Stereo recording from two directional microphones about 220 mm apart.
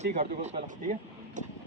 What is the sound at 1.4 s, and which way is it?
Vehicle, 35° right (ahead or behind).